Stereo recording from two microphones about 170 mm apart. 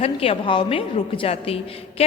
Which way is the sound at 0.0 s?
35° left (ahead or behind).